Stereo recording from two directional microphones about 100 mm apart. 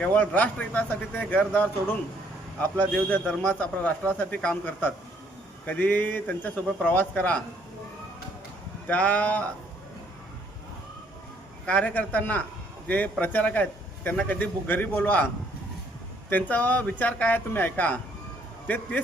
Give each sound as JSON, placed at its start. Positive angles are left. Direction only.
{"t": 0.0, "sound": "a man's voice", "side_deg": 15}
{"t": 8.9, "sound": "a man's voice", "side_deg": 15}
{"t": 11.6, "sound": "a man's voice", "side_deg": 10}
{"t": 16.3, "sound": "a man's voice", "side_deg": 15}